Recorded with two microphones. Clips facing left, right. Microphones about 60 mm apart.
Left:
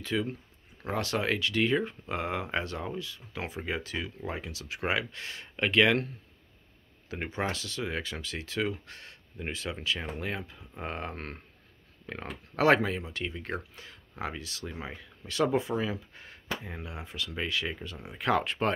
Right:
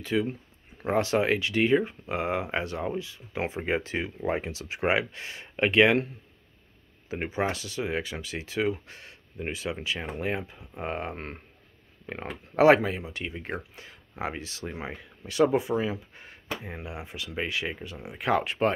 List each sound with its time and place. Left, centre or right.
0.0 s speech: centre
0.8 s speech: right
7.1 s speech: centre
14.3 s speech: right; by 18.7 s centre